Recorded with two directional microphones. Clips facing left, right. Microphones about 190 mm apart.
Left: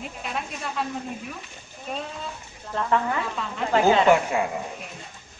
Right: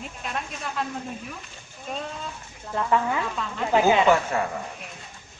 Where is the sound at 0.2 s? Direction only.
Centre (ahead or behind).